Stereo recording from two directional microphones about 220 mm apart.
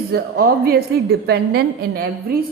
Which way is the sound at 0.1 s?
45° right (ahead or behind).